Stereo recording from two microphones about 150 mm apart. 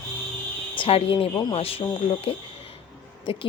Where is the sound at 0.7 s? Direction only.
35° left (ahead or behind).